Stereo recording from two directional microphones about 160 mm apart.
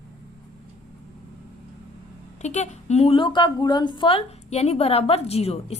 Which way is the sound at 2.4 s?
45° left (ahead or behind).